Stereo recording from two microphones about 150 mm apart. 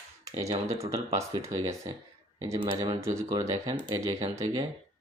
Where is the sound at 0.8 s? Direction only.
20° right (ahead or behind).